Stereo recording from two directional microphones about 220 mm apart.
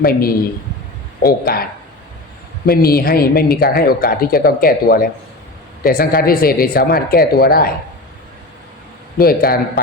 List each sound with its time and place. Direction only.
0.0 s speech: 40° left (ahead or behind)
2.6 s speech: 45° left (ahead or behind)
9.1 s speech: 40° left (ahead or behind)